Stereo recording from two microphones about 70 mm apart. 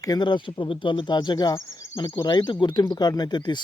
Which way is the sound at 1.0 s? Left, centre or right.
Left.